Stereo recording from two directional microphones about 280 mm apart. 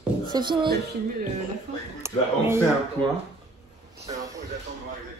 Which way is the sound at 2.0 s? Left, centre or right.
Centre.